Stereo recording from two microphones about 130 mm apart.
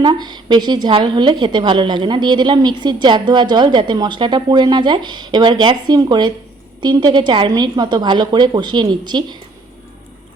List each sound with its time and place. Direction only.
0.0 s a woman's voice: 35° right (ahead or behind)